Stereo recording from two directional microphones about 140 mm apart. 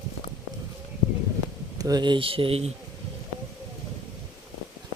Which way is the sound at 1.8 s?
30° right (ahead or behind).